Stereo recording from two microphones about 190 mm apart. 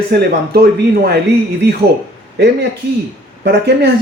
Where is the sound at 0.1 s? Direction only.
55° right (ahead or behind).